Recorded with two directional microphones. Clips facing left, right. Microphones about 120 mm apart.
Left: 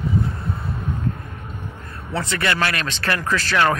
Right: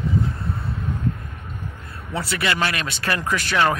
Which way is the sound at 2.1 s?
10° right (ahead or behind).